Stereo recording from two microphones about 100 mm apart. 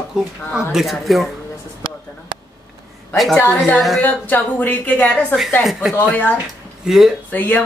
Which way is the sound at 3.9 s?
15° left (ahead or behind).